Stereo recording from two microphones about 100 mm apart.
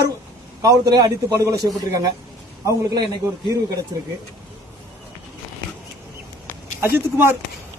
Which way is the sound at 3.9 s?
35° right (ahead or behind).